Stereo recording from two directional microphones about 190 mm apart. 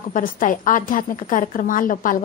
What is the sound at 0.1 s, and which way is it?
A woman's voice, 45° left (ahead or behind).